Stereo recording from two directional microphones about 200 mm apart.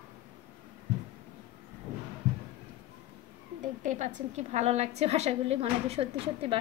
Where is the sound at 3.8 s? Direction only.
40° right (ahead or behind).